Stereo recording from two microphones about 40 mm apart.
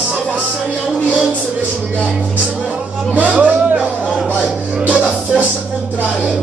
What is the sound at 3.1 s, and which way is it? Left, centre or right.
Speech, right.